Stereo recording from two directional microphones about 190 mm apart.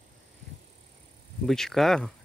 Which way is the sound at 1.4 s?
Centre (ahead or behind).